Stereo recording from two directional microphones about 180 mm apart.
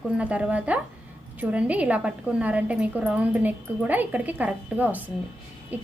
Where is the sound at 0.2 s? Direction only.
5° right (ahead or behind).